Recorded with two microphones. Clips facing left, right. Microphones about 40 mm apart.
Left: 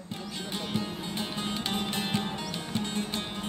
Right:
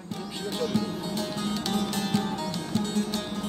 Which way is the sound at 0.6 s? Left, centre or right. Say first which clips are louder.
Right 6 dB; left.